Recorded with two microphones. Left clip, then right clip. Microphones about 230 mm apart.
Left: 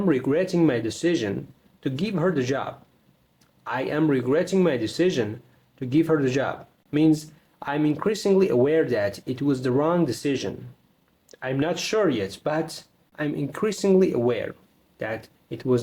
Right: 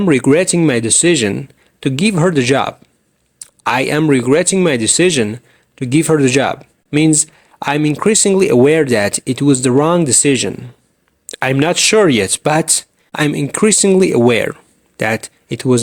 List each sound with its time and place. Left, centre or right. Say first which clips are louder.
0.1 s speech: right 11 dB; right